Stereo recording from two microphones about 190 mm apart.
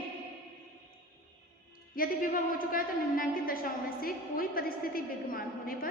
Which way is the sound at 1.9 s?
50° left (ahead or behind).